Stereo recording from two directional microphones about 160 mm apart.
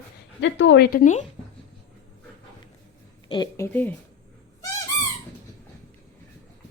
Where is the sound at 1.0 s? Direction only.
50° left (ahead or behind).